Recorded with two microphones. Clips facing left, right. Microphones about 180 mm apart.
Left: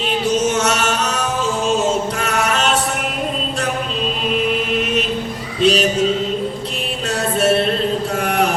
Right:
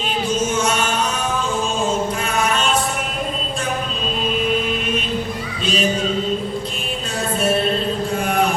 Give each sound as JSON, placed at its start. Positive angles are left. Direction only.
{"t": 0.3, "sound": "chant", "side_deg": 75}
{"t": 5.6, "sound": "music", "side_deg": 75}
{"t": 8.2, "sound": "mantra", "side_deg": 75}